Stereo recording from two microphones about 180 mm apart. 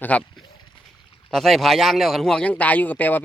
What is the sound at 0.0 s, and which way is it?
Speech, 10° left (ahead or behind).